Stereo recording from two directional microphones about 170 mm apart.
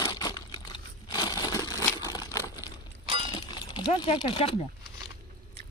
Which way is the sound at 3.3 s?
25° left (ahead or behind).